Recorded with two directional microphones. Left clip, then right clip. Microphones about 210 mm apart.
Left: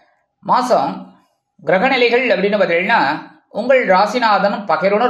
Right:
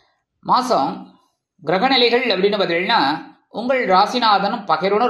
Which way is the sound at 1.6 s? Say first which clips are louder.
Left 2 dB; 20° right (ahead or behind).